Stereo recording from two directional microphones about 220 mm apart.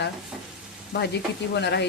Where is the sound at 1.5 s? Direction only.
50° left (ahead or behind).